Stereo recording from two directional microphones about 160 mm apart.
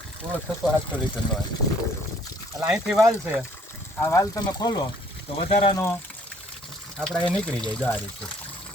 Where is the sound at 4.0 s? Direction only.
15° left (ahead or behind).